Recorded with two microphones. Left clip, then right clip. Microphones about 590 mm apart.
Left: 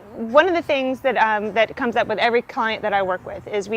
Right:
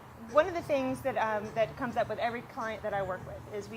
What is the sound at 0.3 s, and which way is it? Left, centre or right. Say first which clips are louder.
A woman's voice: left 11 dB; left.